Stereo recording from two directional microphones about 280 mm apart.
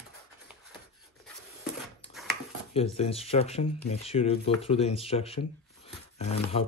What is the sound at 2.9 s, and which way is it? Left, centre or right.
Rub, left.